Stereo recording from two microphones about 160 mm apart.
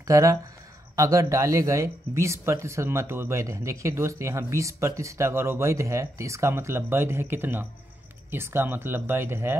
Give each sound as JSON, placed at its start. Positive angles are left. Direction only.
{"t": 0.0, "sound": "speech", "side_deg": -20}